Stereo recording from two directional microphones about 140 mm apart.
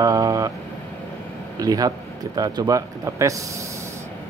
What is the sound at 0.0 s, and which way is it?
Vehicle, 25° right (ahead or behind).